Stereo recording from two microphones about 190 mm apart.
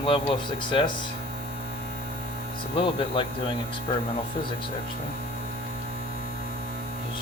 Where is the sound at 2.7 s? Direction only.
25° left (ahead or behind).